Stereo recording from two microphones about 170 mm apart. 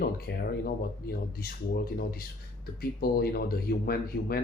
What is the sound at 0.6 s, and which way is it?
Speech, 60° left (ahead or behind).